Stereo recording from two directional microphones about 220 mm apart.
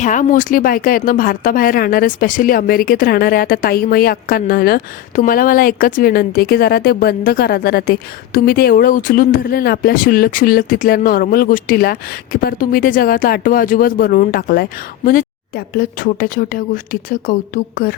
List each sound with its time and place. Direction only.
0.0 s speech: 35° left (ahead or behind)